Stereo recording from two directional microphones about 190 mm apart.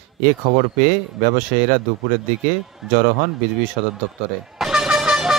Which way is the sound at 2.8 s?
Centre (ahead or behind).